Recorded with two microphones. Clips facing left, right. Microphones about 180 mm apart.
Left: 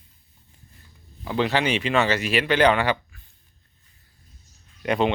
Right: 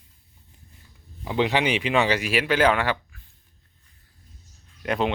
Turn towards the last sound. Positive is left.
turn(degrees=0)  # may be behind; listen again after turning